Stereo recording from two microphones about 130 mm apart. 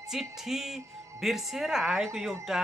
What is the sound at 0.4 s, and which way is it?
A woman's voice, centre (ahead or behind).